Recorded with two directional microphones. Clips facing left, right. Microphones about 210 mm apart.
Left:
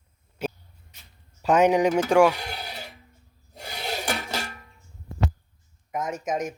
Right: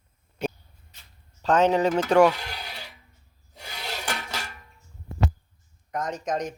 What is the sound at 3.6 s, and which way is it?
Filing, 35° left (ahead or behind).